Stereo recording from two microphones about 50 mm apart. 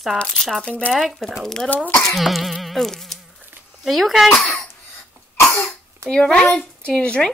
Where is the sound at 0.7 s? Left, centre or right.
Left.